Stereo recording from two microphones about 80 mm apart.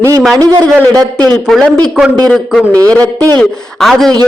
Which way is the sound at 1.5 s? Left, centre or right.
Centre.